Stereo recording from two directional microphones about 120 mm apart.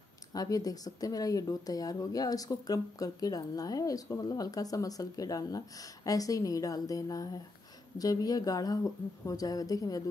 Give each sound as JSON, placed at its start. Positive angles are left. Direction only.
{"t": 0.3, "sound": "speech", "side_deg": 30}